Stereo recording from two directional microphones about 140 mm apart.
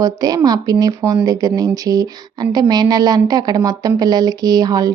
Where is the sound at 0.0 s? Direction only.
25° right (ahead or behind).